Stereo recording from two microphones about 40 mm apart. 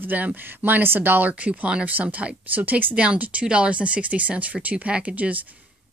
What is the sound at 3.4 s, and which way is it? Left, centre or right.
Speech, right.